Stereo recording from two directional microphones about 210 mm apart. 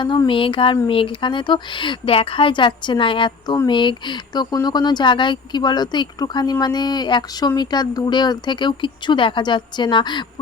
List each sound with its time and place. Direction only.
0.0 s a woman's voice: 20° left (ahead or behind)